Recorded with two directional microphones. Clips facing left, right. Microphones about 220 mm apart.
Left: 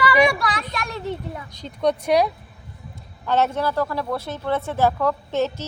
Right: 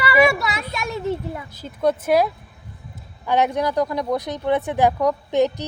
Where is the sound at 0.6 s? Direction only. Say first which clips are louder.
Right 3 dB; 5° right (ahead or behind).